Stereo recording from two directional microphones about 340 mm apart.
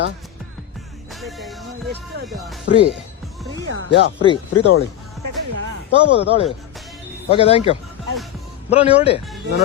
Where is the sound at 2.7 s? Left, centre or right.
Left.